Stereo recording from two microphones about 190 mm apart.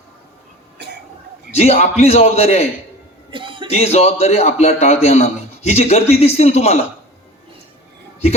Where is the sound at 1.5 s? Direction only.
35° left (ahead or behind).